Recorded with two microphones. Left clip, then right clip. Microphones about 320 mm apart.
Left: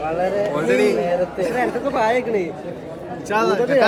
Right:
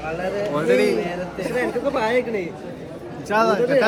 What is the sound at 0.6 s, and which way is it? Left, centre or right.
Speech, centre.